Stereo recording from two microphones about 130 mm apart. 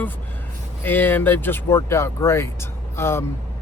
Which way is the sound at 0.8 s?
15° left (ahead or behind).